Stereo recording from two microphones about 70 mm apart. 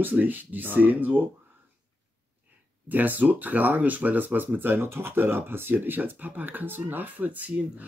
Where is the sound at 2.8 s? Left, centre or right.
Right.